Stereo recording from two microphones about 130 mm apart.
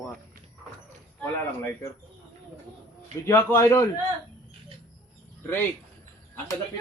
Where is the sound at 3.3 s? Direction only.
20° left (ahead or behind).